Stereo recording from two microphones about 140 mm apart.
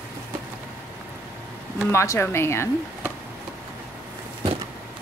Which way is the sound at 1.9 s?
20° left (ahead or behind).